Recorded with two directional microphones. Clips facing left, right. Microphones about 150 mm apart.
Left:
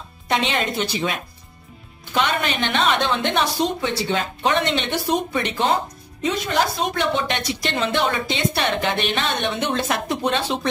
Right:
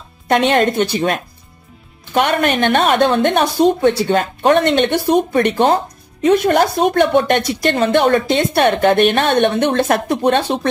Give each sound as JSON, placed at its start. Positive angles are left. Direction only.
{"t": 0.3, "sound": "speech", "side_deg": -55}